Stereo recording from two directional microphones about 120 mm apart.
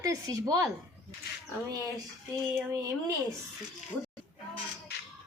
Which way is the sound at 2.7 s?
30° right (ahead or behind).